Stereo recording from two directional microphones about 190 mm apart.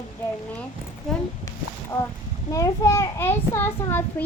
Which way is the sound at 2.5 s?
15° left (ahead or behind).